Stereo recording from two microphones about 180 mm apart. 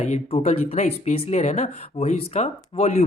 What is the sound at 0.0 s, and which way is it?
Speech, 35° left (ahead or behind).